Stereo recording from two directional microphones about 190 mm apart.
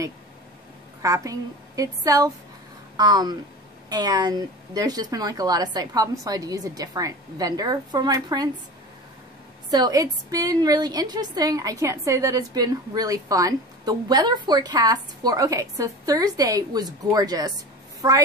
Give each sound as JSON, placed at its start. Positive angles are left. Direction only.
{"t": 1.0, "sound": "a woman's voice", "side_deg": -20}
{"t": 9.7, "sound": "a woman's voice", "side_deg": -20}